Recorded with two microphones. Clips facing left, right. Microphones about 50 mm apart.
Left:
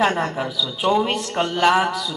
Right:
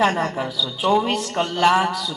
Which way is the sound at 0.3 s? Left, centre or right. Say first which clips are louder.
Even; centre.